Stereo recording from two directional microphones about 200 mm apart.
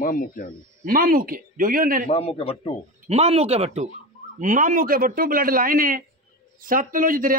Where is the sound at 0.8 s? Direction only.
45° right (ahead or behind).